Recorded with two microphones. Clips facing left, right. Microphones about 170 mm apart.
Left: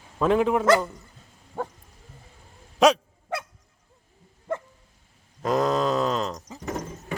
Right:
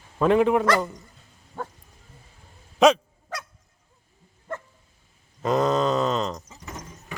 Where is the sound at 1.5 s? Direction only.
20° left (ahead or behind).